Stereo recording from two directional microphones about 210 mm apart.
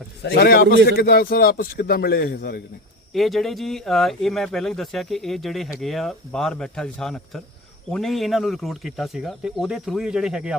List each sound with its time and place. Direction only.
0.2 s a man's voice: 50° left (ahead or behind)
3.1 s speech: centre (ahead or behind)